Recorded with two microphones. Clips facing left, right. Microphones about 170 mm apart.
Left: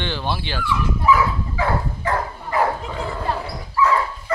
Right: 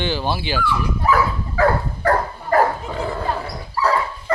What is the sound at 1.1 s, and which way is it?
Dog, 45° right (ahead or behind).